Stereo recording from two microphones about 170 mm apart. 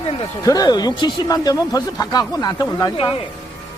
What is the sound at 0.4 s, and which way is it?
Speech, 20° left (ahead or behind).